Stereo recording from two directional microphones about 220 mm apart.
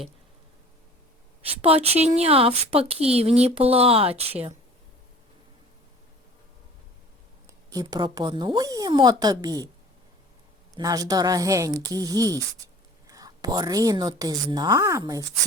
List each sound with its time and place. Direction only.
1.6 s speech: 25° right (ahead or behind)
7.7 s a woman's voice: 15° right (ahead or behind)
10.8 s a woman's voice: 15° right (ahead or behind)